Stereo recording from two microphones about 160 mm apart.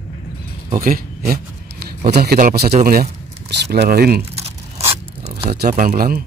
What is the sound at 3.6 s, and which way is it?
Speech, 85° right.